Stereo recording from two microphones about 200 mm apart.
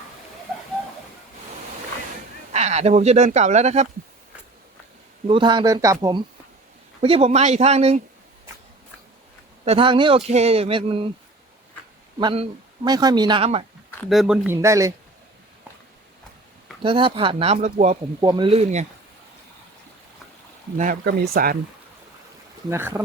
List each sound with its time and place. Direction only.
2.5 s speech: 35° right (ahead or behind)
5.3 s speech: 25° right (ahead or behind)
9.6 s speech: 25° right (ahead or behind)
12.2 s speech: 25° right (ahead or behind)
14.1 s speech: 5° right (ahead or behind)
16.8 s speech: 25° right (ahead or behind)
18.2 s speech: 20° right (ahead or behind)
20.7 s speech: 40° right (ahead or behind)
21.0 s speech: 50° right (ahead or behind)
22.7 s speech: 10° right (ahead or behind)